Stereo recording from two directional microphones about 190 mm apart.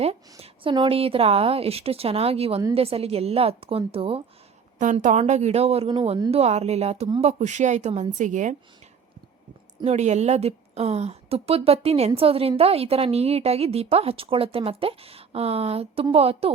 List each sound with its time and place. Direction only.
0.0 s speech: 30° right (ahead or behind)
4.8 s speech: 40° right (ahead or behind); by 6.3 s 25° right (ahead or behind)
6.3 s speech: 35° right (ahead or behind)
9.8 s speech: 35° right (ahead or behind)